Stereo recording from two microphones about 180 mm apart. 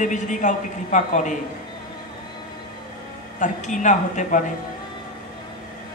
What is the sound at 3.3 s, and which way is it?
A woman's voice, 45° left (ahead or behind).